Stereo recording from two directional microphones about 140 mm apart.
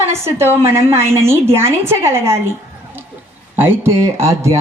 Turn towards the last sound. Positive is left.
turn(degrees=-20)  # may be behind; listen again after turning